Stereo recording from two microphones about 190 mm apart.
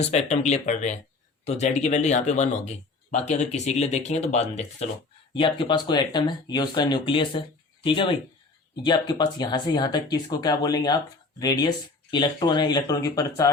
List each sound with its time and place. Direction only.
0.0 s speech: 35° left (ahead or behind)
5.3 s speech: 25° left (ahead or behind)